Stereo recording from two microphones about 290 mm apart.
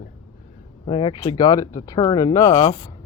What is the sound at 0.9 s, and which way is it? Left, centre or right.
Speech, centre.